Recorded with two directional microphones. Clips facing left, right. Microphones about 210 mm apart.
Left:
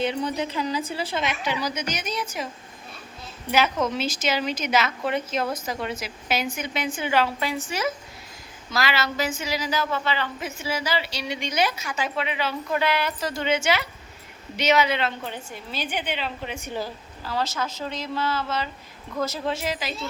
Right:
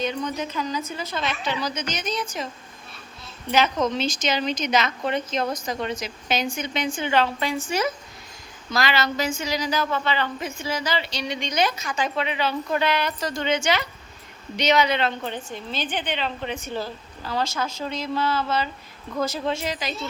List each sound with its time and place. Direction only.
0.0 s a woman's voice: 30° left (ahead or behind)
1.2 s a woman's voice: 15° left (ahead or behind)
3.5 s a woman's voice: 5° left (ahead or behind)
8.7 s a woman's voice: 5° left (ahead or behind)